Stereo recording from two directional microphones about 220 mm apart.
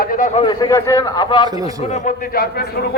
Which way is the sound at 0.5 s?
15° left (ahead or behind).